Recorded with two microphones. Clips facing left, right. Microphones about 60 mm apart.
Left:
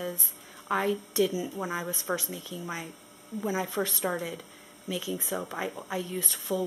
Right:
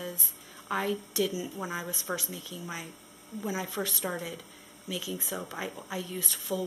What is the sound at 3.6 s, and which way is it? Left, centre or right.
Speech, centre.